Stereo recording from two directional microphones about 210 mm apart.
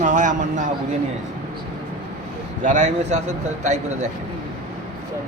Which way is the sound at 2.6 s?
35° right (ahead or behind).